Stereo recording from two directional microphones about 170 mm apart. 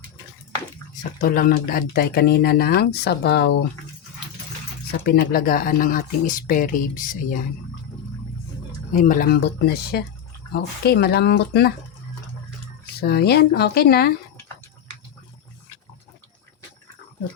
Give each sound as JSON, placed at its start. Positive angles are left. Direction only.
{"t": 1.2, "sound": "speech", "side_deg": 55}
{"t": 4.9, "sound": "speech", "side_deg": 65}
{"t": 8.9, "sound": "speech", "side_deg": 50}
{"t": 13.0, "sound": "speech", "side_deg": 70}